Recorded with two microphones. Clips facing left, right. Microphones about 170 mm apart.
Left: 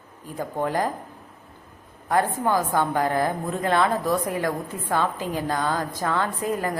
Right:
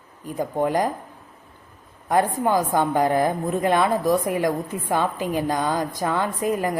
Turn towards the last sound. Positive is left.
turn(degrees=-15)  # may be behind; listen again after turning